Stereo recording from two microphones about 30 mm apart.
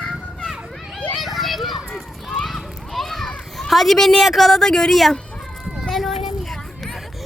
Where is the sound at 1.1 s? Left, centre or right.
Centre.